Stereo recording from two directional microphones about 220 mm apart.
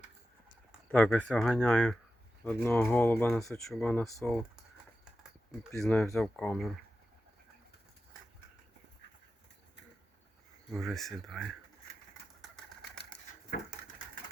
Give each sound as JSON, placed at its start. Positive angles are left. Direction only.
{"t": 0.9, "sound": "speech", "side_deg": 5}
{"t": 5.5, "sound": "speech", "side_deg": 0}
{"t": 10.7, "sound": "speech", "side_deg": 0}